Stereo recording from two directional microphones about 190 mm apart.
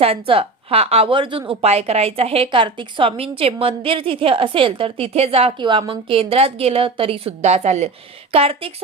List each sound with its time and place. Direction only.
0.0 s a woman's voice: 30° right (ahead or behind)